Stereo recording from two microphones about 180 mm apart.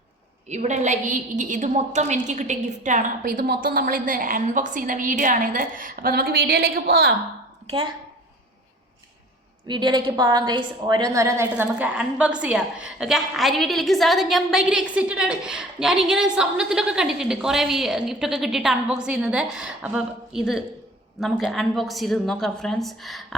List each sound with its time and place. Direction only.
0.4 s a woman's voice: 40° right (ahead or behind); by 7.1 s 55° right (ahead or behind)
9.6 s a woman's voice: 25° right (ahead or behind); by 23.2 s centre (ahead or behind)